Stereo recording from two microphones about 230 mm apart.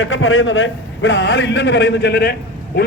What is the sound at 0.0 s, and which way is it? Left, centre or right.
A man's voice, left.